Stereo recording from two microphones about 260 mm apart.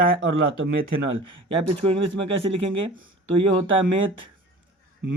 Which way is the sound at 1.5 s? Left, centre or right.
Right.